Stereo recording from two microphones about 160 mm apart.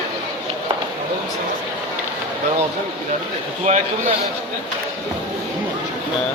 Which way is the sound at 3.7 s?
45° right (ahead or behind).